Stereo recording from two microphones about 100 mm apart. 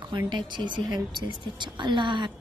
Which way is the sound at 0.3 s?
50° right (ahead or behind).